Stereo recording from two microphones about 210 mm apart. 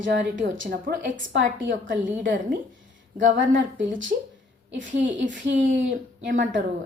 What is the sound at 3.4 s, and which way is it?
A woman's voice, 65° right (ahead or behind).